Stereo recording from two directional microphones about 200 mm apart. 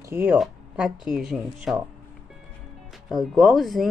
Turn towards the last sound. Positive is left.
turn(degrees=0)  # may be behind; listen again after turning